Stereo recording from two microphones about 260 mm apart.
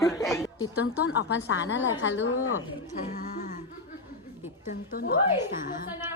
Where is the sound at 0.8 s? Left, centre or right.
Left.